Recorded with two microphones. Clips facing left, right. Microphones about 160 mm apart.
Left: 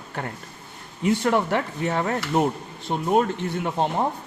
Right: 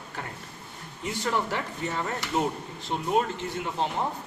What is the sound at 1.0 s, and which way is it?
Speech, 65° left (ahead or behind).